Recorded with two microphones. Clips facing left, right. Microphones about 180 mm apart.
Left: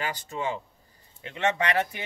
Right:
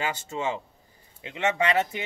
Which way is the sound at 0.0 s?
25° right (ahead or behind).